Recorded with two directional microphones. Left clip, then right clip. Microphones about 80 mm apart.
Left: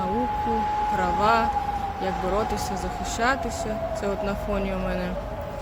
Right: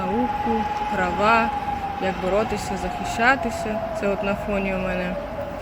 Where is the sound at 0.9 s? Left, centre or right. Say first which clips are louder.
Right 3 dB; left.